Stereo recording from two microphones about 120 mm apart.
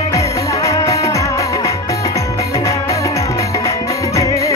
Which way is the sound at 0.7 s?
25° left (ahead or behind).